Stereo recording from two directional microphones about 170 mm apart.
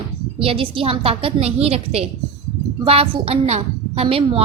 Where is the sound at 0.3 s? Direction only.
30° right (ahead or behind).